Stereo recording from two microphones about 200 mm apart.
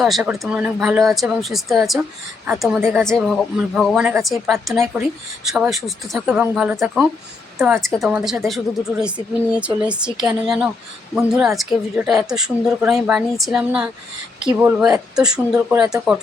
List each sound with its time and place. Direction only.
0.0 s a woman's voice: centre (ahead or behind)